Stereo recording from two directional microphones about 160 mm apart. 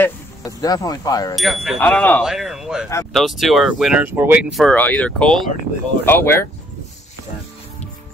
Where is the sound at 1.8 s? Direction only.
10° left (ahead or behind).